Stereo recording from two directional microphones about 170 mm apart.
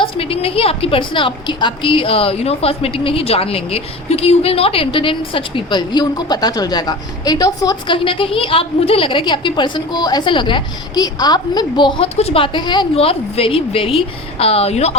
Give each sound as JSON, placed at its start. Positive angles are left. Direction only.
{"t": 0.0, "sound": "a woman's voice", "side_deg": 35}